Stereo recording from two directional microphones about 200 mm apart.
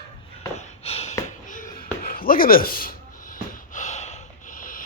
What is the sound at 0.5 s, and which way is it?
Snort, 30° left (ahead or behind).